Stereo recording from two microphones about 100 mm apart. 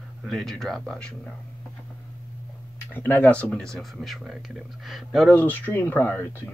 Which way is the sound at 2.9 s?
20° left (ahead or behind).